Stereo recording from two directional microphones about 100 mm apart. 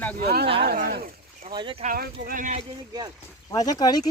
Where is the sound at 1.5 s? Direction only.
55° right (ahead or behind).